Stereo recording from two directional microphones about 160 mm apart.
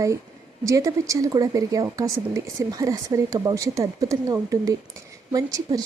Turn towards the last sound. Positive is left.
turn(degrees=-20)  # may be behind; listen again after turning